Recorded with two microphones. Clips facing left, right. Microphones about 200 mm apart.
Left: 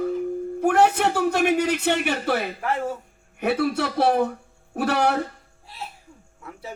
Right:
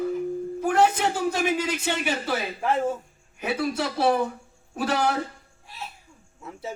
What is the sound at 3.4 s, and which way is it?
A man's voice, 60° left (ahead or behind).